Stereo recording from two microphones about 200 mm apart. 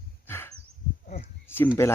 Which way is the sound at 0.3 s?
10° left (ahead or behind).